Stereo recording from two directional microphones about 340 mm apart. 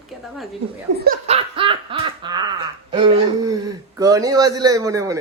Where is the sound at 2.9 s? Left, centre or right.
Centre.